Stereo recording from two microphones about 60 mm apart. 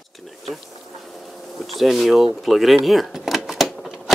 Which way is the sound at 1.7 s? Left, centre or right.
Centre.